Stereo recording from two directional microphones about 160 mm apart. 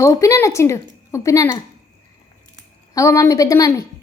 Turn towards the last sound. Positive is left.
turn(degrees=20)  # may be behind; listen again after turning